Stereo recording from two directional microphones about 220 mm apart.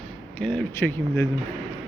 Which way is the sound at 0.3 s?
5° left (ahead or behind).